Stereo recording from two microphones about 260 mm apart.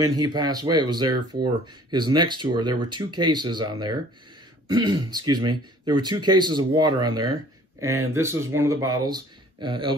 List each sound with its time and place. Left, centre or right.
0.0 s speech: centre